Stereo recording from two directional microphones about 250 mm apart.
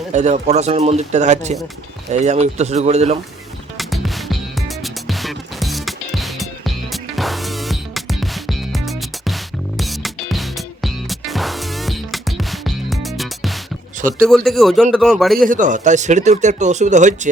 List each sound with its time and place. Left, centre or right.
0.1 s speech: right
3.8 s music: centre
14.3 s speech: centre
15.4 s speech: right